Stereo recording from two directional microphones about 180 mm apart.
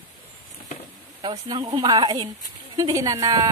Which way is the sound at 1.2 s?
25° right (ahead or behind).